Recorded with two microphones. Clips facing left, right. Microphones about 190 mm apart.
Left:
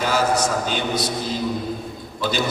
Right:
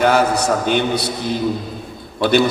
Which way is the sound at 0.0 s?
60° right (ahead or behind).